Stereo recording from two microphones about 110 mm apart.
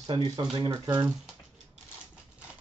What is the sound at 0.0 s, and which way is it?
Speech, 40° right (ahead or behind).